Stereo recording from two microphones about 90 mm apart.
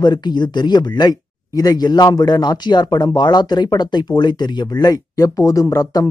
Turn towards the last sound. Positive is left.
turn(degrees=40)  # may be behind; listen again after turning